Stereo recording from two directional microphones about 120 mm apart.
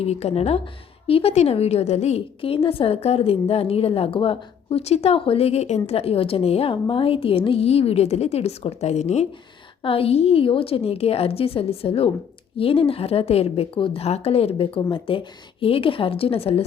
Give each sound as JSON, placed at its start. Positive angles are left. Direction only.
{"t": 0.0, "sound": "a woman's voice", "side_deg": 60}
{"t": 9.8, "sound": "a woman's voice", "side_deg": 50}